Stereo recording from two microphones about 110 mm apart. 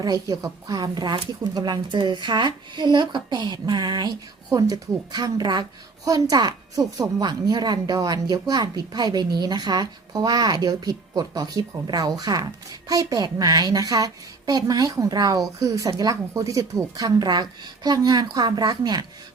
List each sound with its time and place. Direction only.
0.0 s a woman's voice: 35° right (ahead or behind)